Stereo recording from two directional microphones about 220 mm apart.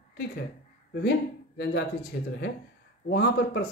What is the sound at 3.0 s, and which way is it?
Speech, 50° left (ahead or behind).